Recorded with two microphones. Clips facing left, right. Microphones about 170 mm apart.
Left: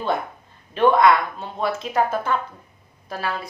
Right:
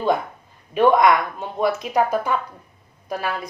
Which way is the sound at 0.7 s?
15° right (ahead or behind).